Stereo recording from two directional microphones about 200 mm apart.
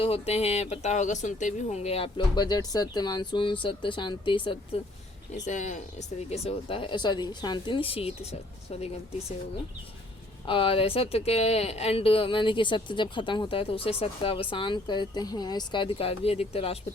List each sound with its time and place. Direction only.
0.0 s speech: 30° left (ahead or behind)
5.5 s speech: 35° left (ahead or behind)
10.4 s speech: 25° left (ahead or behind)